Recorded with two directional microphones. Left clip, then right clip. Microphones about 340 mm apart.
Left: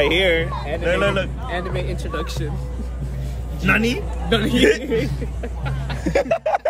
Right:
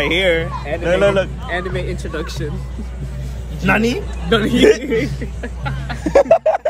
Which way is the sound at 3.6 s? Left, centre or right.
Centre.